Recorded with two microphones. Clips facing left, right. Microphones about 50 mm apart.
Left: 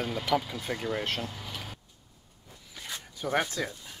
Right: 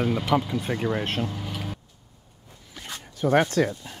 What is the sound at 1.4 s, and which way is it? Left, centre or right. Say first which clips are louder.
Vehicle: right 7 dB; centre.